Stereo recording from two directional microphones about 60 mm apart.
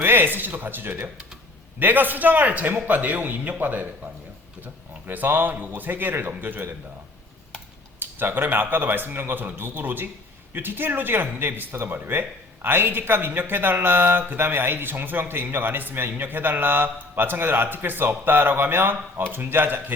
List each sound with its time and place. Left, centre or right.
0.0 s a man's voice: right
7.9 s a man's voice: right